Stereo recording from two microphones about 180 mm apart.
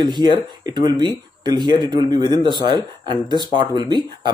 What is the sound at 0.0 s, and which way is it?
Speech, 25° right (ahead or behind).